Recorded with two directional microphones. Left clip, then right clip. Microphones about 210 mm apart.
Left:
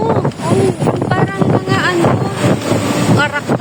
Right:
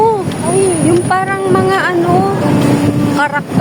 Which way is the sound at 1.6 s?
15° right (ahead or behind).